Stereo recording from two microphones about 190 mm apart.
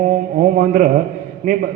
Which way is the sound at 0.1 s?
45° right (ahead or behind).